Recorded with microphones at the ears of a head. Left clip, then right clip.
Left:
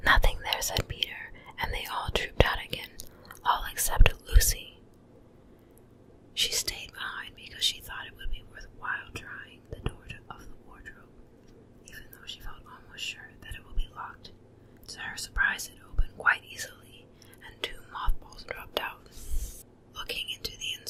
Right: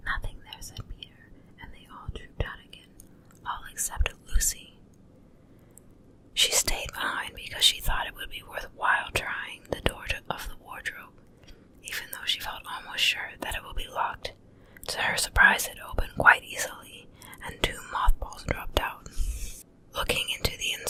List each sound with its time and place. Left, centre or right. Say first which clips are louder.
0.0 s whispering: left 10 dB; left
6.7 s whispering: right 7 dB; right